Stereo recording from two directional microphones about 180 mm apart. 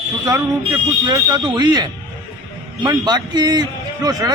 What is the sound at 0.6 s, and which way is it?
A man's voice, 25° right (ahead or behind).